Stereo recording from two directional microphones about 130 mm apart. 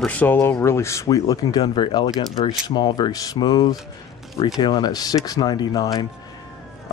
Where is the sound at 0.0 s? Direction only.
10° left (ahead or behind).